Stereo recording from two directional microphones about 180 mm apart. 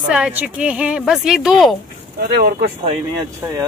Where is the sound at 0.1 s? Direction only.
5° right (ahead or behind).